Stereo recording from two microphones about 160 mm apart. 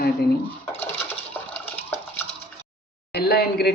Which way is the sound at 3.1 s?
85° left.